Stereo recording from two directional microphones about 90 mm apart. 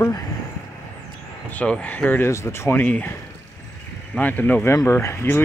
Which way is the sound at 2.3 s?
30° left (ahead or behind).